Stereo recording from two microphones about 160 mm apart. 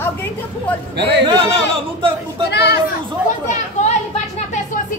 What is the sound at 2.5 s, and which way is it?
Speech, 90° left.